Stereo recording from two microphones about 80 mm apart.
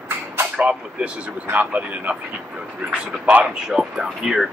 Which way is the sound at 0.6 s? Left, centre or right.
Centre.